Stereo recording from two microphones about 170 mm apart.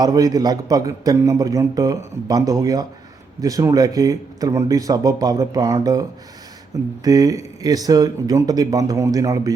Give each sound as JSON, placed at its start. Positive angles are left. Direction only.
{"t": 0.0, "sound": "a man's voice", "side_deg": -20}